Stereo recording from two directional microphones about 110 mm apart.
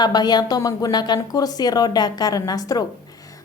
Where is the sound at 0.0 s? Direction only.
40° left (ahead or behind).